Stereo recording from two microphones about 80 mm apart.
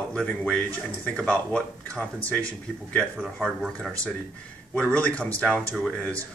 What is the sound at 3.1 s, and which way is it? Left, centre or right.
Speech, centre.